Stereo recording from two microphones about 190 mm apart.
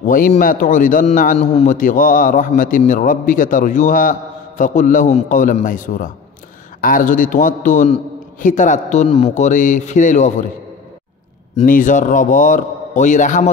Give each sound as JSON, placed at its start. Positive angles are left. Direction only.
{"t": 0.0, "sound": "a sound", "side_deg": 45}
{"t": 0.3, "sound": "a man's voice", "side_deg": 45}
{"t": 1.4, "sound": "a man's voice", "side_deg": 35}
{"t": 11.6, "sound": "a man's voice", "side_deg": 45}